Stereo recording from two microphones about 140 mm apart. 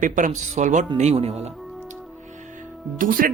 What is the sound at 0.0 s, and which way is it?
Speech, 65° right (ahead or behind).